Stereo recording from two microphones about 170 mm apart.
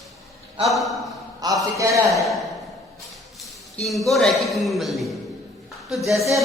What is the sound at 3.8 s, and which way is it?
A man's voice, centre (ahead or behind).